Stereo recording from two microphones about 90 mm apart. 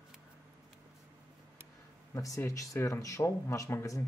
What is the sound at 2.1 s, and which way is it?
Speech, 40° left (ahead or behind).